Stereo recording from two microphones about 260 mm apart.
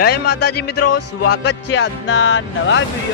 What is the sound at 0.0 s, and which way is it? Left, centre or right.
Speech, left.